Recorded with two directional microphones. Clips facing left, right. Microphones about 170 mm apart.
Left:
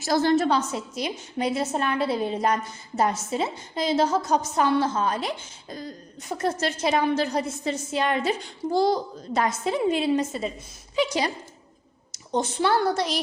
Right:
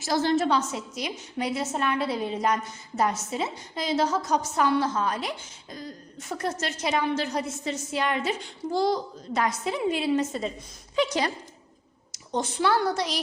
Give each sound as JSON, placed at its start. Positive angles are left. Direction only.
{"t": 0.0, "sound": "a woman's voice", "side_deg": 60}
{"t": 0.3, "sound": "a woman's voice", "side_deg": 35}
{"t": 6.1, "sound": "a woman's voice", "side_deg": 20}
{"t": 10.2, "sound": "a woman's voice", "side_deg": 5}
{"t": 12.1, "sound": "a woman's voice", "side_deg": 25}